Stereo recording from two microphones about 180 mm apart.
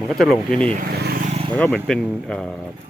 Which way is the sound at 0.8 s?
50° right (ahead or behind).